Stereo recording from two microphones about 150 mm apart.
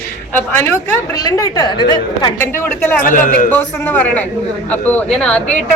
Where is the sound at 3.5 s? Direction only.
10° left (ahead or behind).